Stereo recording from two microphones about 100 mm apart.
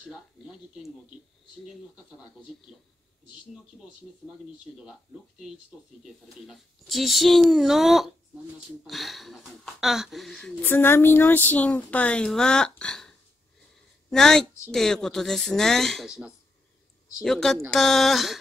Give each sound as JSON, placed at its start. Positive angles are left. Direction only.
{"t": 0.0, "sound": "speech", "side_deg": -5}
{"t": 6.0, "sound": "speech", "side_deg": 0}
{"t": 10.5, "sound": "a woman's voice", "side_deg": 20}
{"t": 14.1, "sound": "speech", "side_deg": 5}